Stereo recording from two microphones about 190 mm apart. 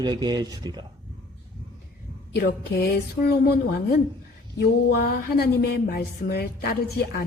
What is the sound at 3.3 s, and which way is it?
Speech, 55° left (ahead or behind).